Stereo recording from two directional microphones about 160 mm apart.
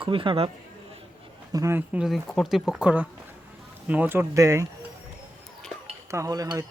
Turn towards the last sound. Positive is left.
turn(degrees=-25)  # may be behind; listen again after turning